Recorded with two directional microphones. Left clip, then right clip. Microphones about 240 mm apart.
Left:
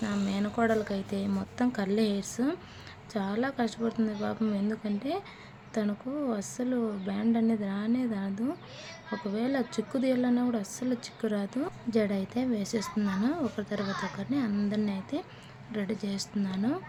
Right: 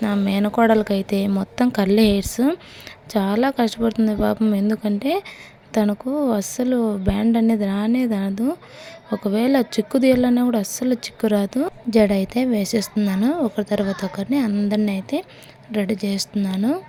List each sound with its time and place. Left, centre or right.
0.0 s speech: right